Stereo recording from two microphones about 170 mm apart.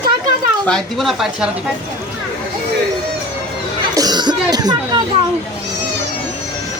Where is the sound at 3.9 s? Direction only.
25° right (ahead or behind).